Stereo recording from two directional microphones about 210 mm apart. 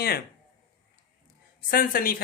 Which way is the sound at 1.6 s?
45° left (ahead or behind).